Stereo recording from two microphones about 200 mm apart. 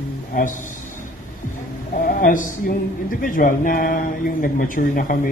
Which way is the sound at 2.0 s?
45° left (ahead or behind).